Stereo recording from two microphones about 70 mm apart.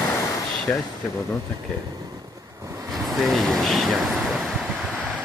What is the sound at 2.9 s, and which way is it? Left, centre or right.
Speech, centre.